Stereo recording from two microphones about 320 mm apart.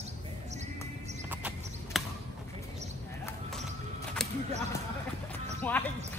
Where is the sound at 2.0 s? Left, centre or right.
Centre.